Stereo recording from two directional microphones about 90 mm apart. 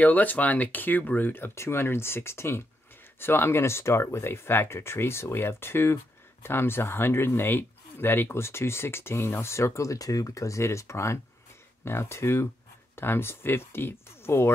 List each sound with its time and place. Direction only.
0.0 s speech: 20° left (ahead or behind)